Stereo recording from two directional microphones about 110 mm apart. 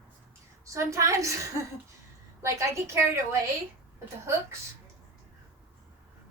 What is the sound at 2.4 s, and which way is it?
Speech, 25° right (ahead or behind).